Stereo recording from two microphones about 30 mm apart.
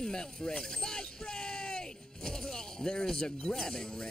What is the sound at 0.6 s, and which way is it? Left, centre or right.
Speech, left.